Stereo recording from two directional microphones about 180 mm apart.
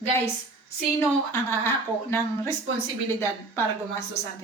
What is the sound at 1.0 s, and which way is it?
A woman's voice, 15° left (ahead or behind).